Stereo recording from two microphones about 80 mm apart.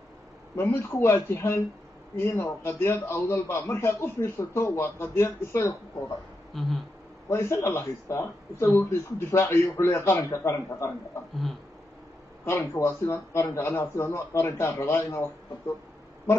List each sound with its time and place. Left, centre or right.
0.6 s speech: left
3.7 s speech: left
6.5 s speech: centre
7.2 s speech: left
12.4 s speech: left